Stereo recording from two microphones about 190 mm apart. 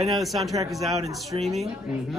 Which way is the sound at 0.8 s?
20° right (ahead or behind).